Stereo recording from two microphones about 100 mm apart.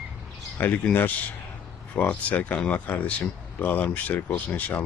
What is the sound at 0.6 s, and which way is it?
Speech, 20° left (ahead or behind).